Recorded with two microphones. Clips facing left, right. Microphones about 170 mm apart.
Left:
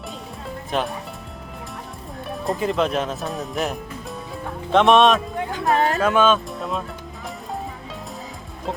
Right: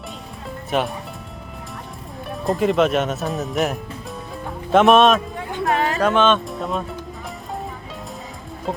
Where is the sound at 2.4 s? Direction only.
Centre (ahead or behind).